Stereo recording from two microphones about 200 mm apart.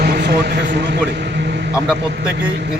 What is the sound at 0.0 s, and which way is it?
Vehicle, 50° right (ahead or behind).